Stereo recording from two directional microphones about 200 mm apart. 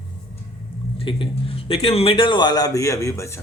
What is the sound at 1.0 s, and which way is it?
A man's voice, 25° left (ahead or behind).